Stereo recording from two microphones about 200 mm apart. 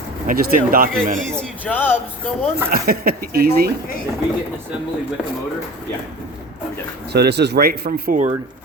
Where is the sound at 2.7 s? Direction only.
50° right (ahead or behind).